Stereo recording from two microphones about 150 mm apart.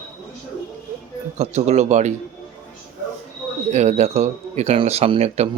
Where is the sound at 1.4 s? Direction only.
45° right (ahead or behind).